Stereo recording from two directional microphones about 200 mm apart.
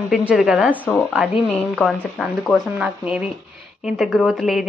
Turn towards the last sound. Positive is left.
turn(degrees=0)  # may be behind; listen again after turning